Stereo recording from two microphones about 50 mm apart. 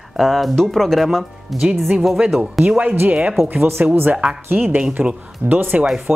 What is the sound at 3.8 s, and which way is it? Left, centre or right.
Speech, right.